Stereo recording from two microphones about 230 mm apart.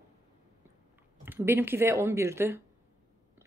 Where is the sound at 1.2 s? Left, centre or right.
Centre.